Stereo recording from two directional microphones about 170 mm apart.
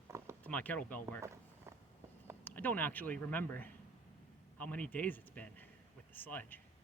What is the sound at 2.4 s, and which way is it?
Speech, 10° left (ahead or behind).